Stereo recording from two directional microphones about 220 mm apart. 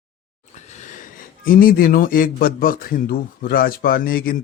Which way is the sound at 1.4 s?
40° left (ahead or behind).